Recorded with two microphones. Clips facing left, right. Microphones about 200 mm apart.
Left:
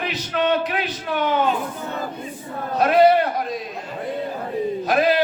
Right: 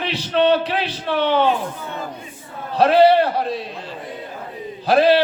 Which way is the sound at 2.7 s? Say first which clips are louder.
Right 2 dB; 30° right (ahead or behind).